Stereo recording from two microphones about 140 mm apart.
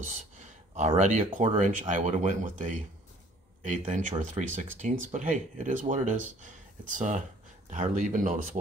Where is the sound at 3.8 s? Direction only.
65° right (ahead or behind).